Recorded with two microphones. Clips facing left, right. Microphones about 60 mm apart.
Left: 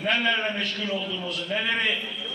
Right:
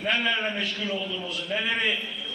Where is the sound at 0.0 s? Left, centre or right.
Centre.